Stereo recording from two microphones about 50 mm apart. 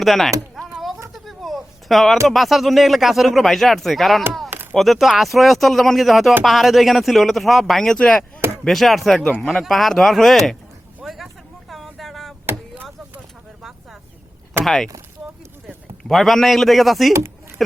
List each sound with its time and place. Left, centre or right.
0.0 s speech: centre
0.6 s a sound: centre
2.2 s speech: centre
7.9 s chop: centre
8.6 s speech: centre
9.4 s chop: centre
9.6 s speech: centre
11.0 s vehicle: centre
14.6 s speech: centre
16.0 s speech: centre